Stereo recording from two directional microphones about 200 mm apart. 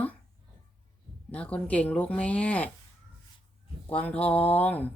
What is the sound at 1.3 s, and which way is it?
Speech, 5° left (ahead or behind).